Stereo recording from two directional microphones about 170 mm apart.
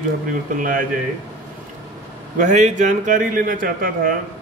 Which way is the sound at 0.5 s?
50° right (ahead or behind).